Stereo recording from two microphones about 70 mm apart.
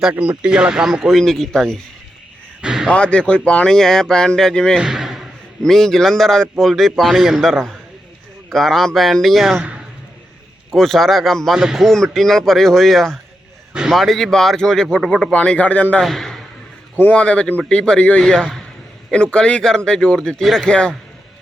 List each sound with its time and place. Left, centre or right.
0.1 s speech: centre
1.1 s speech: centre
2.6 s a sound: centre
2.9 s speech: centre
4.8 s a sound: centre
5.6 s a man's voice: centre
10.7 s a man's voice: centre
11.5 s speech: centre
11.9 s a man's voice: centre
15.3 s speech: centre
16.0 s a man's voice: centre
17.0 s a man's voice: centre